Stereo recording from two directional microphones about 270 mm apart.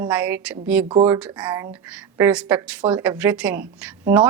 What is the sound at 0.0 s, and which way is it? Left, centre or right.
A woman's voice, centre.